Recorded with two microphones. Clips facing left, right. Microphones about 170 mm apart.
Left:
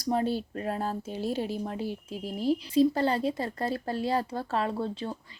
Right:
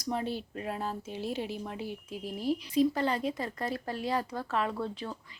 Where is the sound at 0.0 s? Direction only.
35° left (ahead or behind).